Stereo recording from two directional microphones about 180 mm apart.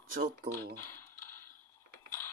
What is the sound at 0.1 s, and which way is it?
Speech, 55° right (ahead or behind).